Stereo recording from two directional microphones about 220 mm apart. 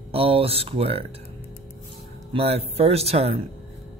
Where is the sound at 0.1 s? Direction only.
25° right (ahead or behind).